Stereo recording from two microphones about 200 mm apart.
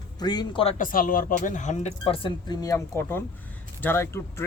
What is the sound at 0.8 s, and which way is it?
Speech, 45° left (ahead or behind).